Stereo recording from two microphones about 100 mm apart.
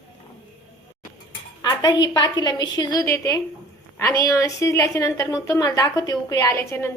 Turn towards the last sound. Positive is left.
turn(degrees=25)  # may be behind; listen again after turning